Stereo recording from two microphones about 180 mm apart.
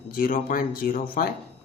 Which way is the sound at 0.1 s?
50° left (ahead or behind).